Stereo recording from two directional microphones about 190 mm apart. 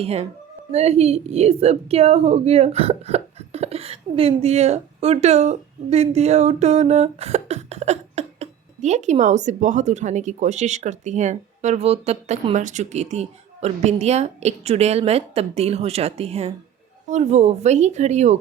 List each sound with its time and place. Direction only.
0.0 s a woman's voice: 30° right (ahead or behind)